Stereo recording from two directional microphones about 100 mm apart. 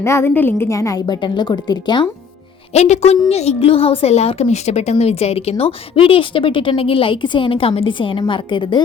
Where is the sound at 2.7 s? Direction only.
90° left; by 8.8 s 50° left (ahead or behind).